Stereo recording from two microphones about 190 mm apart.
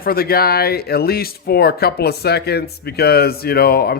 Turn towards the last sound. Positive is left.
turn(degrees=55)  # may be behind; listen again after turning